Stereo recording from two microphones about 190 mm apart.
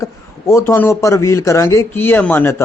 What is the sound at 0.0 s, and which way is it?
A man's voice, 15° left (ahead or behind).